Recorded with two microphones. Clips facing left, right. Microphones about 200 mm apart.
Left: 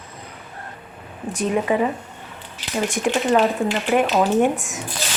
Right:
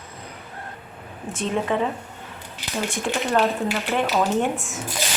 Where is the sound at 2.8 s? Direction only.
15° left (ahead or behind).